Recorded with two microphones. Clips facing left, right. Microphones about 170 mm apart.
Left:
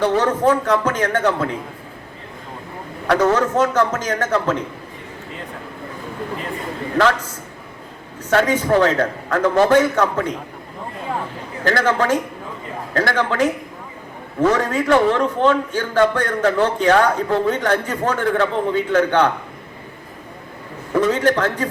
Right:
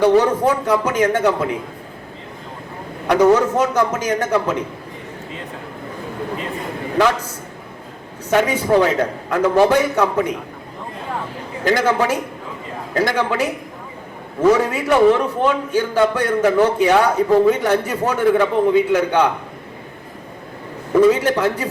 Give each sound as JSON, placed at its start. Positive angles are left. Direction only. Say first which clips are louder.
{"t": 0.0, "sound": "a man's voice", "louder": "right 3 dB", "side_deg": -10}
{"t": 3.1, "sound": "a man's voice", "louder": "right 3 dB", "side_deg": -10}
{"t": 8.3, "sound": "a man's voice", "louder": "right 1 dB", "side_deg": -10}
{"t": 11.6, "sound": "a man's voice", "louder": "right 1 dB", "side_deg": -15}
{"t": 21.0, "sound": "a man's voice", "louder": "right 3 dB", "side_deg": -10}